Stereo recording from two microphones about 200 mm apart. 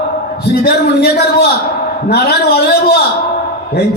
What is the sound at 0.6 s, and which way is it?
A man's voice, 50° left (ahead or behind).